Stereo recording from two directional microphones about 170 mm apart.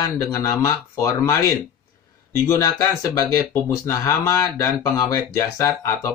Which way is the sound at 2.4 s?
15° left (ahead or behind).